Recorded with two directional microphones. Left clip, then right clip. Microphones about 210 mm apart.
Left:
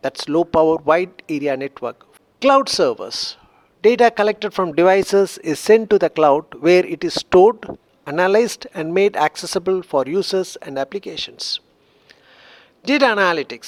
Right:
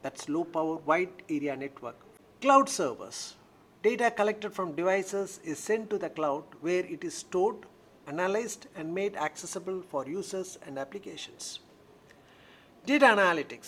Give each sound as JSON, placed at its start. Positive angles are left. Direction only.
{"t": 0.0, "sound": "speech", "side_deg": 45}